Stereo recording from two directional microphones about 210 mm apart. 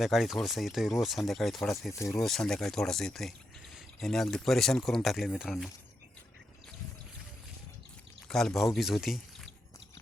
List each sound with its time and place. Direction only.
0.0 s speech: centre (ahead or behind)
1.9 s speech: 15° left (ahead or behind)
2.1 s speech: centre (ahead or behind)
8.3 s speech: centre (ahead or behind)